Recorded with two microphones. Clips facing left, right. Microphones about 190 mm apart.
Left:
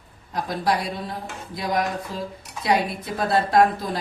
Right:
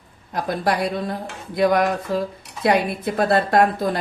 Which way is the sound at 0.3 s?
55° right (ahead or behind).